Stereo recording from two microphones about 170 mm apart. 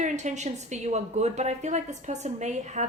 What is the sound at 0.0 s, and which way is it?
A woman's voice, 45° right (ahead or behind).